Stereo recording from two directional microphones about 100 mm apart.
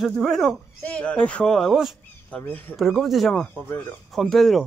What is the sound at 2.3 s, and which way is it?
Speech, 15° left (ahead or behind).